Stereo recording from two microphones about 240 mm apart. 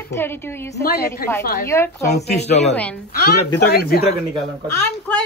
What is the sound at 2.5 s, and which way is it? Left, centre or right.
Speech, left.